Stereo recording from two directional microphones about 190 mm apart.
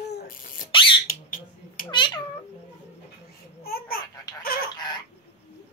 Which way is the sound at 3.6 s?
55° left (ahead or behind).